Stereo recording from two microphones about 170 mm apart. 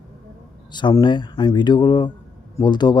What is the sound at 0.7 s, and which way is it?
Speech, 25° left (ahead or behind).